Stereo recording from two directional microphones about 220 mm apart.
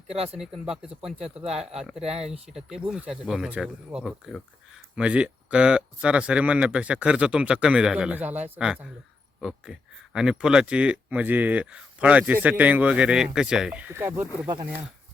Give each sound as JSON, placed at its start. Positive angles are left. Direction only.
{"t": 0.1, "sound": "speech", "side_deg": -25}
{"t": 0.3, "sound": "speech", "side_deg": 0}
{"t": 14.4, "sound": "speech", "side_deg": -20}